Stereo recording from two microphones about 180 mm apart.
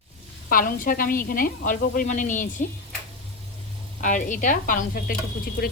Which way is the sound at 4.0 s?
45° left (ahead or behind).